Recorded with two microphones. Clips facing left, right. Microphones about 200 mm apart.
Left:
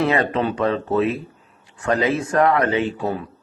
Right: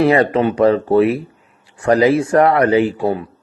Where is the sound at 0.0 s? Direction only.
35° right (ahead or behind).